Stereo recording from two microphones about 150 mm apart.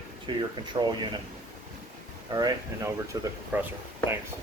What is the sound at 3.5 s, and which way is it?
Speech, 10° right (ahead or behind).